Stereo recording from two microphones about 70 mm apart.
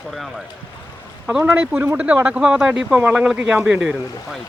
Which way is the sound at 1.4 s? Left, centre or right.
Right.